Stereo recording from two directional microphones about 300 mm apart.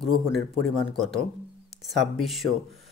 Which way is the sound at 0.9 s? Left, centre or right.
Centre.